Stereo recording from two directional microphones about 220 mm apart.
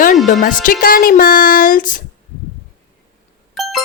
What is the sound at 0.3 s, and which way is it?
Speech, 40° left (ahead or behind).